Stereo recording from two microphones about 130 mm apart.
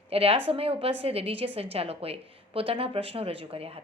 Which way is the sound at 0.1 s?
50° right (ahead or behind).